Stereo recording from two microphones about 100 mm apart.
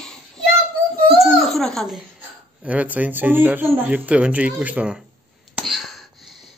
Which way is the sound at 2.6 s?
15° right (ahead or behind).